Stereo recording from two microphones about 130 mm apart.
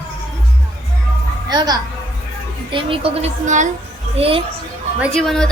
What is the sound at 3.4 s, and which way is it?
Speech, 75° right (ahead or behind).